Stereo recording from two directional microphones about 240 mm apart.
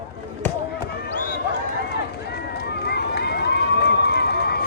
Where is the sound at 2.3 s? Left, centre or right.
Left.